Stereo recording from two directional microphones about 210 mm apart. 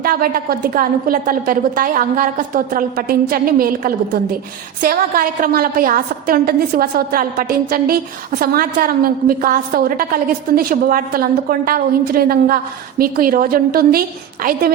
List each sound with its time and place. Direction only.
0.0 s a woman's voice: 45° right (ahead or behind)